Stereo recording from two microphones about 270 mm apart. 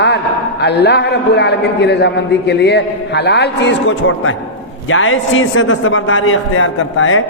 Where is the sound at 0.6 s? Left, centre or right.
Left.